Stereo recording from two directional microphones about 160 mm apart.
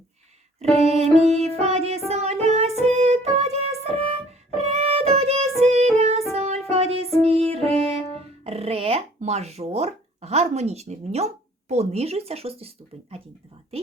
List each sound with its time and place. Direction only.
0.9 s music: 40° right (ahead or behind)
8.4 s a sound: 40° right (ahead or behind)
11.7 s speech: 40° right (ahead or behind)